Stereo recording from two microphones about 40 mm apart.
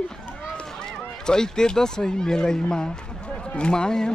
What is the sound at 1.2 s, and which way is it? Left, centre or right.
Speech, centre.